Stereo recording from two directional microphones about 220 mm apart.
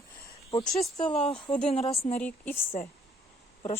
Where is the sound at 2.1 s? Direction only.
5° left (ahead or behind).